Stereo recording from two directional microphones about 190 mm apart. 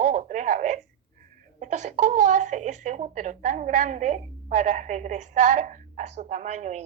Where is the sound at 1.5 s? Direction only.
40° right (ahead or behind).